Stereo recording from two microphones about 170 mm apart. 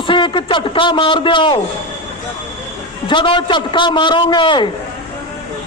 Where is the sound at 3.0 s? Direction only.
30° left (ahead or behind).